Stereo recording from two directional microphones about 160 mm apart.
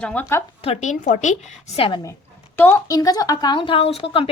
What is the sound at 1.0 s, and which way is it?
Speech, 50° left (ahead or behind).